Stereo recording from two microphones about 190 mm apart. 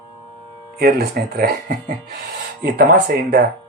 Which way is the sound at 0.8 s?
55° right (ahead or behind).